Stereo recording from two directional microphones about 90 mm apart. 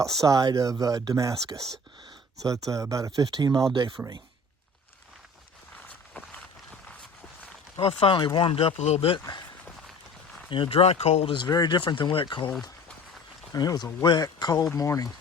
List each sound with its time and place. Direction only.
0.0 s chopping: 40° right (ahead or behind)
2.6 s chopping: 35° right (ahead or behind)
3.2 s speech: 45° right (ahead or behind)
7.8 s speech: 80° left
8.4 s speech: 85° left
10.5 s speech: 80° left
11.4 s speech: 50° left (ahead or behind)
11.8 s speech: 60° left (ahead or behind)
13.5 s speech: 50° left (ahead or behind)